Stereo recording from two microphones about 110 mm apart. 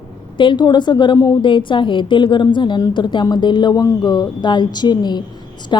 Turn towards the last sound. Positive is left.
turn(degrees=40)  # may be behind; listen again after turning